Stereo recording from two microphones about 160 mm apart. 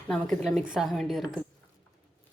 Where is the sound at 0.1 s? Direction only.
Centre (ahead or behind).